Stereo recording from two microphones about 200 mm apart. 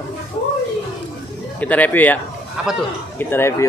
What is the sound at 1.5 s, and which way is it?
Speech, 5° left (ahead or behind).